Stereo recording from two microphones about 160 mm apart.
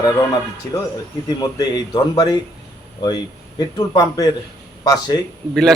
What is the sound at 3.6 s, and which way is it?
Speech, 25° left (ahead or behind).